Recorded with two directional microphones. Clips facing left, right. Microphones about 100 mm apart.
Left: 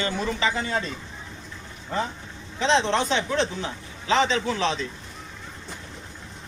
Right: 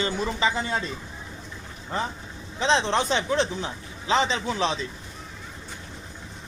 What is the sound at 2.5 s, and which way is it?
Speech, 15° right (ahead or behind).